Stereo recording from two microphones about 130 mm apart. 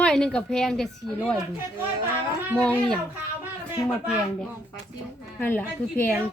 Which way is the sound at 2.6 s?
10° left (ahead or behind).